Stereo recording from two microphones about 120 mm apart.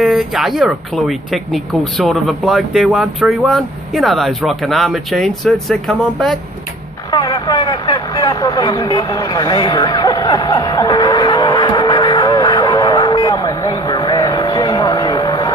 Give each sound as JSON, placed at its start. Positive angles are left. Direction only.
{"t": 0.0, "sound": "speech", "side_deg": 0}
{"t": 7.1, "sound": "vehicle", "side_deg": 35}